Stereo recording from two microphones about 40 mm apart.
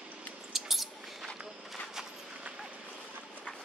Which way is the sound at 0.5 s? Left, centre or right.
Centre.